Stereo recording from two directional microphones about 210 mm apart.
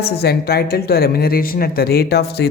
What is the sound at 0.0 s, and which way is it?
Speech, 50° left (ahead or behind).